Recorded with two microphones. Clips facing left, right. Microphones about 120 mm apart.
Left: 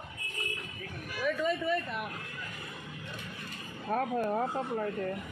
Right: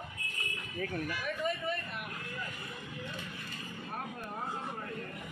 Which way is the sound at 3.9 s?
90° left.